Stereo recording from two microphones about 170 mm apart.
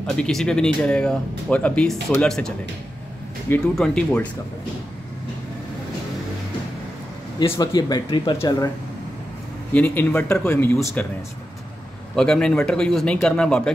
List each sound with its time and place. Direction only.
0.0 s speech: 5° left (ahead or behind)
7.5 s speech: 25° left (ahead or behind)
9.7 s speech: 10° left (ahead or behind)
12.2 s speech: 5° left (ahead or behind)